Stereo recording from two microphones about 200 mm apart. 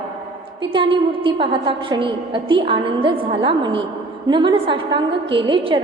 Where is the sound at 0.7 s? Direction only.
25° right (ahead or behind).